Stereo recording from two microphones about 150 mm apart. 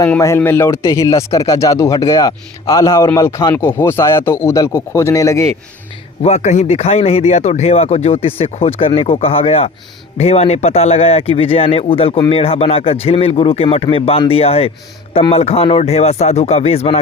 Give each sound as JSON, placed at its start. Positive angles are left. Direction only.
{"t": 0.2, "sound": "speech", "side_deg": 15}
{"t": 6.2, "sound": "speech", "side_deg": 50}